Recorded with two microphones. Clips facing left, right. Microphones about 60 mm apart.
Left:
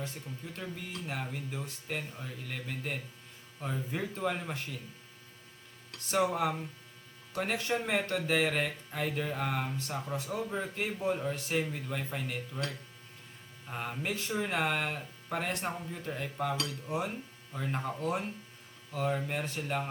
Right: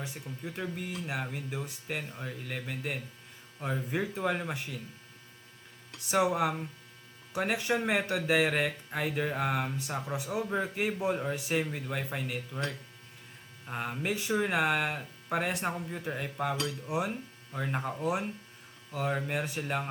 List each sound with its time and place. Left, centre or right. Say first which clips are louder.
0.0 s speech: right 2 dB; centre
5.9 s speech: right 2 dB; centre